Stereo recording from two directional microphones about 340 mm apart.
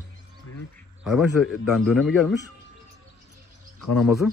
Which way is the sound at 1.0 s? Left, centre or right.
Centre.